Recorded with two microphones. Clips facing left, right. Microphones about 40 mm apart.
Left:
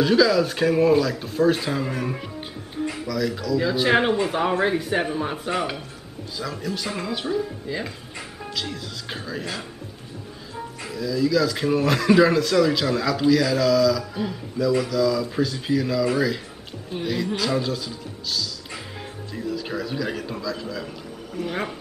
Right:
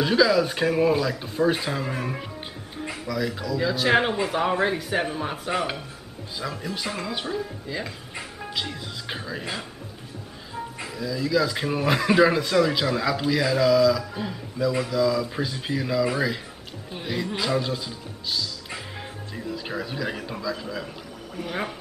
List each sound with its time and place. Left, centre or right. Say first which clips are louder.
0.0 s speech: left 2 dB; centre
2.8 s music: left 6 dB; centre
3.1 s speech: left 1 dB; centre
3.5 s speech: left 1 dB; centre
6.5 s speech: left 2 dB; centre
6.9 s speech: left 3 dB; centre
8.5 s speech: left 1 dB; centre
14.1 s speech: left 4 dB; centre
14.7 s a man's voice: left 2 dB; centre